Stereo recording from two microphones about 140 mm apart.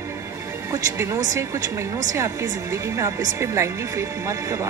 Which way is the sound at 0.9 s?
20° right (ahead or behind).